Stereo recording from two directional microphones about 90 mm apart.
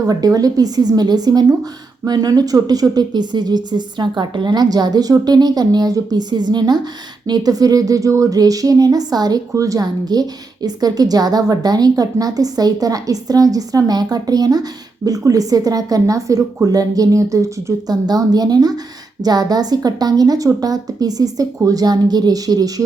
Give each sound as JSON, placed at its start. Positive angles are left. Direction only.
{"t": 0.1, "sound": "a woman's voice", "side_deg": -40}